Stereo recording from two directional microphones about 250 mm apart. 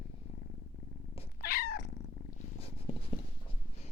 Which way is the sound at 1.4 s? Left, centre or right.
Left.